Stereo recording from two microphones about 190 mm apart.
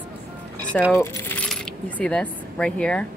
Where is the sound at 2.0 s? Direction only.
5° left (ahead or behind).